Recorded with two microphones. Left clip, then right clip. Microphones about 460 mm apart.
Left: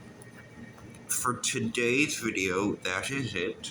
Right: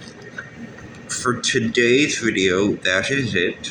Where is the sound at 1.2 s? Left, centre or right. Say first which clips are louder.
Right 10 dB; left.